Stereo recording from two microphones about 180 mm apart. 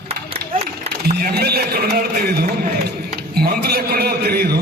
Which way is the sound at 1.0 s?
55° right (ahead or behind).